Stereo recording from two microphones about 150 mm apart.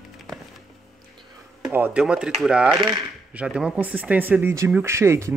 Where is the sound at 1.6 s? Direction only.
10° right (ahead or behind).